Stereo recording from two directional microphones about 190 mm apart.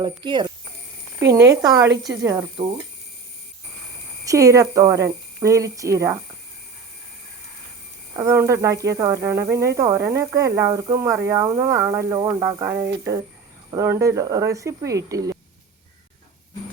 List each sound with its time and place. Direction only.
0.0 s speech: 25° right (ahead or behind)
4.3 s speech: 15° right (ahead or behind)
8.1 s speech: 15° right (ahead or behind)